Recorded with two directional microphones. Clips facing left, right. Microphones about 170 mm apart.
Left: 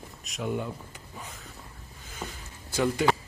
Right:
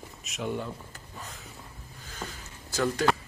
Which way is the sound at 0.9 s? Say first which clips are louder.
Left 1 dB; 10° left (ahead or behind).